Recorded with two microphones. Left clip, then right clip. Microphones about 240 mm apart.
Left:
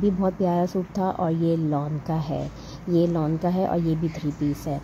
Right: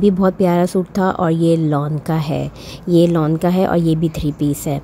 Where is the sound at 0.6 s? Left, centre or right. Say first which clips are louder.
Right 9 dB; right.